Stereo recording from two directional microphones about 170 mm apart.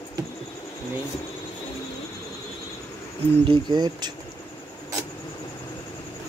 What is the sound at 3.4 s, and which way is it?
Speech, 25° right (ahead or behind).